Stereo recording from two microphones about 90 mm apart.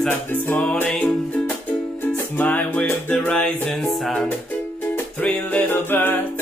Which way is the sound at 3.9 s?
5° left (ahead or behind).